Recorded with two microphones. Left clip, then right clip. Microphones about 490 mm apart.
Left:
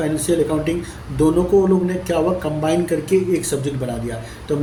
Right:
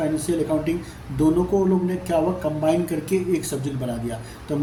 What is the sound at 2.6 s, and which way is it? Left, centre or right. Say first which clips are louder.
Speech: left 2 dB; right.